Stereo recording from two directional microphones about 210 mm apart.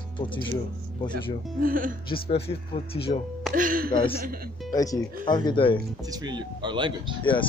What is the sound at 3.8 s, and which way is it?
Speech, 25° left (ahead or behind).